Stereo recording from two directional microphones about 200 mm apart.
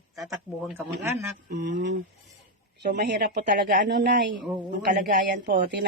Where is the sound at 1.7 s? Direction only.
60° right (ahead or behind).